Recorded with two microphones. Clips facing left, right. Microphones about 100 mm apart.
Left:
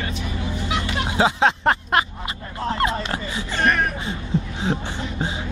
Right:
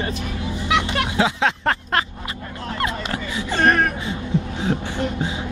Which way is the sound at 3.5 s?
40° right (ahead or behind).